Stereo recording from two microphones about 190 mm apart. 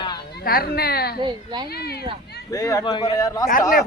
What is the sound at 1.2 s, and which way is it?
Speech, 25° right (ahead or behind).